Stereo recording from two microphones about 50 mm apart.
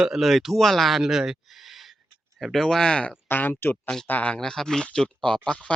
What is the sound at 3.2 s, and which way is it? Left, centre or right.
Speech, left.